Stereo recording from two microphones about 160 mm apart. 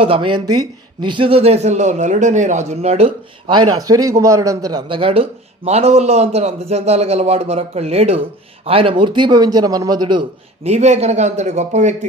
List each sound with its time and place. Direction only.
0.0 s a man's voice: 35° right (ahead or behind)
3.4 s a man's voice: 30° right (ahead or behind)
10.6 s a man's voice: 45° right (ahead or behind)